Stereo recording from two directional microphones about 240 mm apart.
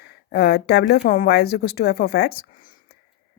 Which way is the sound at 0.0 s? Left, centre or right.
Left.